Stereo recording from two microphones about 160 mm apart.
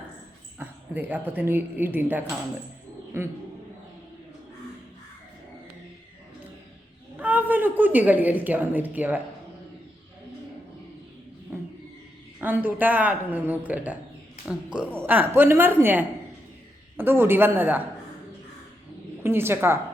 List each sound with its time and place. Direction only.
0.6 s speech: 10° right (ahead or behind)
7.2 s a woman's voice: 10° right (ahead or behind)
12.4 s speech: 10° right (ahead or behind)
19.2 s a woman's voice: 15° right (ahead or behind)